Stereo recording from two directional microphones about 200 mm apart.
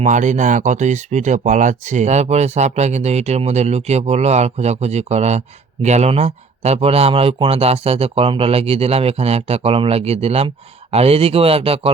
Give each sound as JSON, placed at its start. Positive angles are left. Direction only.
{"t": 0.0, "sound": "speech", "side_deg": -35}